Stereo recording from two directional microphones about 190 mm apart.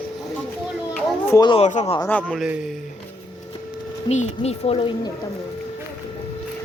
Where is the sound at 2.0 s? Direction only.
10° left (ahead or behind).